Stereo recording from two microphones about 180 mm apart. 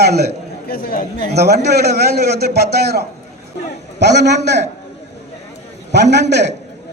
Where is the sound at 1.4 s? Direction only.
65° right (ahead or behind).